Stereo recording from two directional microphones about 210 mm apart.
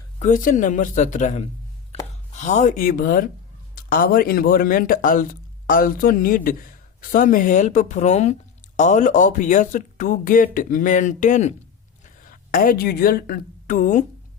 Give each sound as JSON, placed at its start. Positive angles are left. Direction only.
{"t": 0.2, "sound": "a man's voice", "side_deg": 35}